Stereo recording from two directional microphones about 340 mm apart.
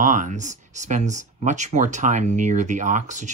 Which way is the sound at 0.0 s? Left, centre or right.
Right.